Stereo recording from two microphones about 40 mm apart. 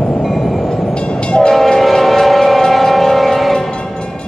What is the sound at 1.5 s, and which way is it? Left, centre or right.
Civil defense siren, centre.